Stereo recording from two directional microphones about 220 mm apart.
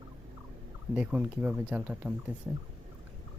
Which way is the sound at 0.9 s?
5° right (ahead or behind).